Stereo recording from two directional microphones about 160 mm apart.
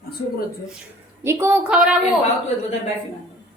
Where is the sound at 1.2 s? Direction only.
15° right (ahead or behind).